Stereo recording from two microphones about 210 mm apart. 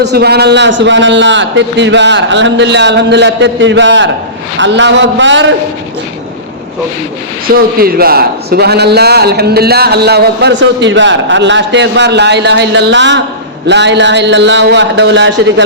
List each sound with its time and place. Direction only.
0.0 s a man's voice: 50° right (ahead or behind)
7.4 s a man's voice: 45° right (ahead or behind)